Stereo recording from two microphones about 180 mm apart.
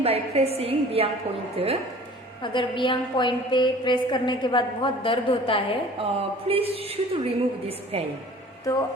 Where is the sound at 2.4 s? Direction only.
25° left (ahead or behind).